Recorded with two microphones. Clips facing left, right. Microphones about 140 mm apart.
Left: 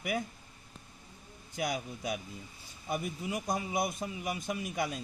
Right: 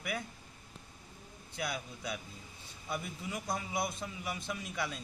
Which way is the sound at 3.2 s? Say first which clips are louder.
Left 3 dB; 20° left (ahead or behind).